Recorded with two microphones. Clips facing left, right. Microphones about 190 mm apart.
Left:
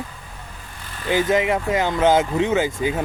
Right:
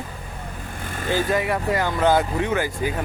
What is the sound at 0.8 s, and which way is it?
Vehicle, 50° right (ahead or behind).